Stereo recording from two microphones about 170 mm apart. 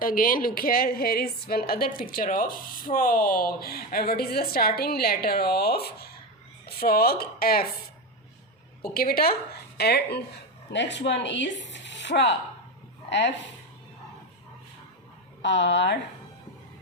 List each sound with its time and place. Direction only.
0.0 s a woman's voice: 55° left (ahead or behind)
8.8 s a woman's voice: 60° left (ahead or behind)
10.7 s speech: 90° left
15.4 s speech: 90° left